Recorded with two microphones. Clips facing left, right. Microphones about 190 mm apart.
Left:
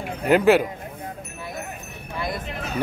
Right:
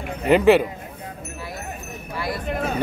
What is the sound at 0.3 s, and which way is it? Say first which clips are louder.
Speech: right 2 dB; 5° left (ahead or behind).